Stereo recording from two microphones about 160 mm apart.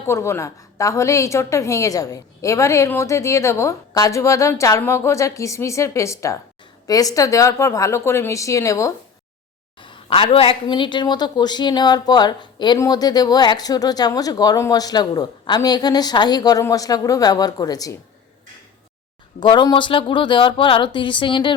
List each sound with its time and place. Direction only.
0.0 s a woman's voice: 15° left (ahead or behind)
9.8 s a woman's voice: 30° left (ahead or behind)
19.4 s speech: 30° left (ahead or behind)